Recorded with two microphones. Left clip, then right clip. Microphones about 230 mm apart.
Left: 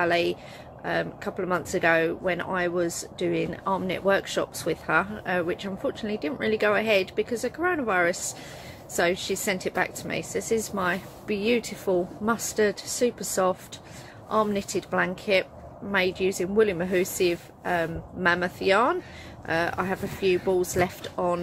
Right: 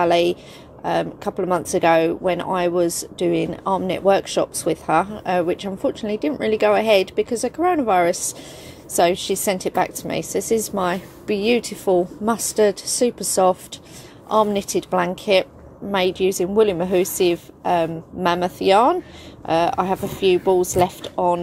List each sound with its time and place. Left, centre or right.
0.0 s a woman's voice: centre